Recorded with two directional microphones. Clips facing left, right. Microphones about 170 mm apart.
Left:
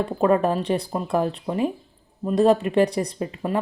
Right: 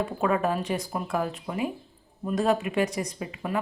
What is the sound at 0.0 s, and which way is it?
Speech, 35° left (ahead or behind).